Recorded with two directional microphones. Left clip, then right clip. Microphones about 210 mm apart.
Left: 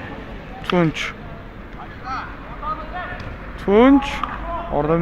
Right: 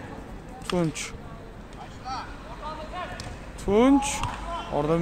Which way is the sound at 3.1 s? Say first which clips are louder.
Left 6 dB; 10° right (ahead or behind).